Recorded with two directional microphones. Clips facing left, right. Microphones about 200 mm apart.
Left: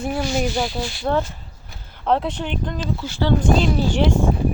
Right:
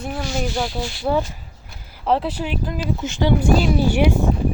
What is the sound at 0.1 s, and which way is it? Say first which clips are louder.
Speech: left 2 dB; 5° left (ahead or behind).